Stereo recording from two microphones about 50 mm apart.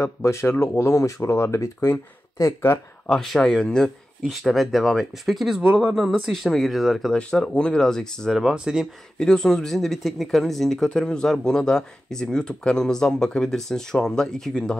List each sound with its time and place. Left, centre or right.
0.0 s speech: left
0.6 s speech: left
3.1 s speech: centre
3.3 s speech: centre
4.3 s speech: centre
5.6 s speech: right
5.9 s speech: centre
7.2 s speech: centre
8.5 s speech: centre
9.2 s speech: centre